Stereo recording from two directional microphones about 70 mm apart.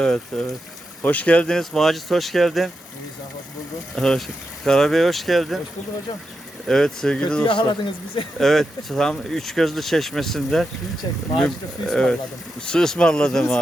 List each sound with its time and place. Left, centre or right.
0.0 s speech: centre
1.0 s speech: left; by 2.6 s centre
3.9 s speech: centre
6.7 s speech: centre
7.5 s a man's voice: left
8.4 s speech: centre